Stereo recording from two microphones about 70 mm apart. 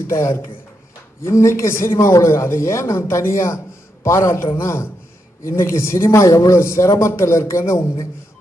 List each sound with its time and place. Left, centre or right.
0.1 s a man's voice: left